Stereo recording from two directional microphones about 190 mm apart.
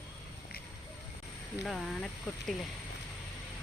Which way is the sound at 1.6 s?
Centre (ahead or behind).